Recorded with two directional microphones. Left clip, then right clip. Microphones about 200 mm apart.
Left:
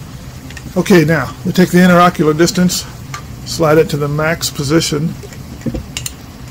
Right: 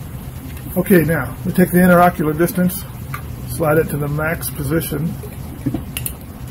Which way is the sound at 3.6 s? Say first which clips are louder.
Left 5 dB; 40° left (ahead or behind).